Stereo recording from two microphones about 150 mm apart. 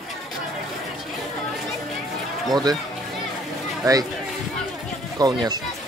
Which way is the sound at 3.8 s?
25° right (ahead or behind).